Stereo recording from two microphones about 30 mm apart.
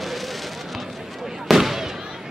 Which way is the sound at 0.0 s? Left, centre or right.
Centre.